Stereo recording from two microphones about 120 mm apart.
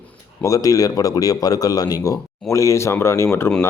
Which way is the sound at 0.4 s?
30° left (ahead or behind).